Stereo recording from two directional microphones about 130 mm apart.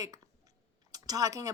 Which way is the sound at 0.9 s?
30° right (ahead or behind).